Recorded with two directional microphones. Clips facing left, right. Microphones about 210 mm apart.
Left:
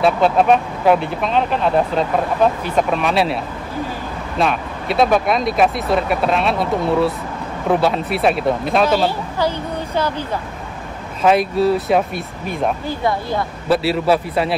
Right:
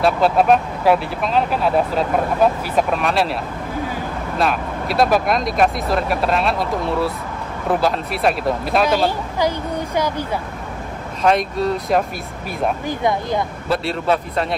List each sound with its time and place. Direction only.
0.0 s speech: centre (ahead or behind)
4.4 s speech: centre (ahead or behind)
11.2 s speech: 5° left (ahead or behind)
12.8 s speech: 20° right (ahead or behind)
13.7 s speech: 5° left (ahead or behind)